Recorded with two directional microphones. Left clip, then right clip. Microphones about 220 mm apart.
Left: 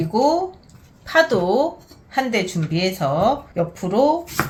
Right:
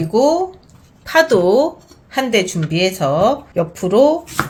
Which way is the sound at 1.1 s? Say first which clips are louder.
Right 4 dB; 45° right (ahead or behind).